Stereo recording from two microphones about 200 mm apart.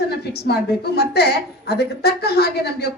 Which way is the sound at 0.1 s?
55° left (ahead or behind).